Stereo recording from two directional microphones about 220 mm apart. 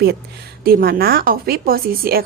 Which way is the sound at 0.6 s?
40° right (ahead or behind).